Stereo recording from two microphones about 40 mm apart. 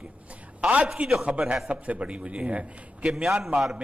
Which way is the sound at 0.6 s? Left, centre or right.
Right.